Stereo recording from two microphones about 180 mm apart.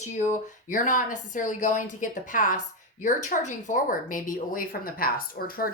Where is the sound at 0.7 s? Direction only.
45° left (ahead or behind).